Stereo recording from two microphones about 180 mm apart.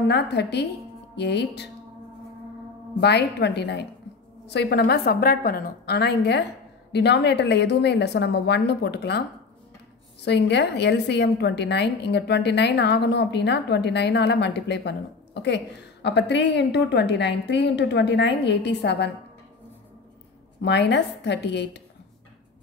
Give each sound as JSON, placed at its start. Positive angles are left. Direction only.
{"t": 0.1, "sound": "a woman's voice", "side_deg": 70}
{"t": 3.0, "sound": "a woman's voice", "side_deg": 70}
{"t": 10.2, "sound": "a woman's voice", "side_deg": 70}
{"t": 20.6, "sound": "a woman's voice", "side_deg": 70}